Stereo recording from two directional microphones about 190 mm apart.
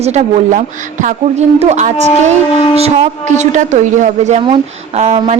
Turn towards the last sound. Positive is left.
turn(degrees=-35)  # may be behind; listen again after turning